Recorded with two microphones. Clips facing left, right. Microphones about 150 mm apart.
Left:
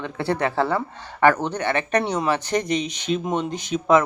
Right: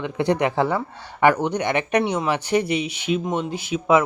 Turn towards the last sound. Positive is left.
turn(degrees=-10)  # may be behind; listen again after turning